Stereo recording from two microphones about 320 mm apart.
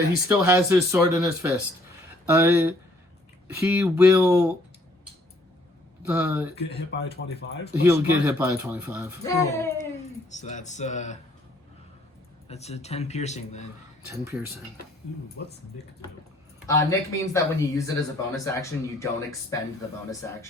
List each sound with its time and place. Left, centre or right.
0.3 s speech: centre
6.0 s speech: centre
6.6 s speech: left
7.7 s speech: centre
9.2 s speech: centre
10.2 s speech: left
12.5 s speech: centre
14.1 s speech: centre
16.6 s speech: centre